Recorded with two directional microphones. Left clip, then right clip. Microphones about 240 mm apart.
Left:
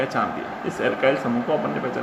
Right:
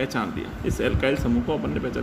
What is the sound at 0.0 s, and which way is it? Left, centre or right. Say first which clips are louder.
Speech: left 4 dB; right.